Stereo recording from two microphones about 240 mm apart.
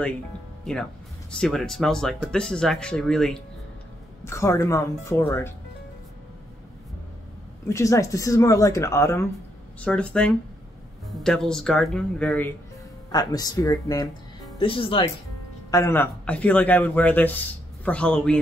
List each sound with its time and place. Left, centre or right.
1.3 s speech: centre
7.6 s speech: centre
15.7 s speech: centre